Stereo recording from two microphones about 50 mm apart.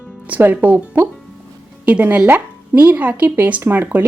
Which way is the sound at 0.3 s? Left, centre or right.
Right.